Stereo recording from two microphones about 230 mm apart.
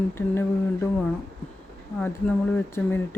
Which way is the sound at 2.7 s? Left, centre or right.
Centre.